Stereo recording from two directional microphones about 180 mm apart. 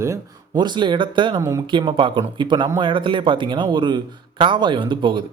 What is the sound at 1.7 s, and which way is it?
Speech, 25° right (ahead or behind).